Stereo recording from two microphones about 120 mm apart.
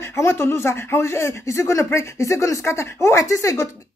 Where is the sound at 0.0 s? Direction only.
20° left (ahead or behind).